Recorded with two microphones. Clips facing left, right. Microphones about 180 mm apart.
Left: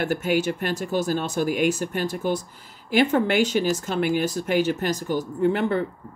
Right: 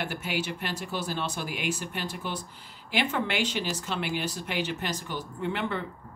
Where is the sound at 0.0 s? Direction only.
45° left (ahead or behind).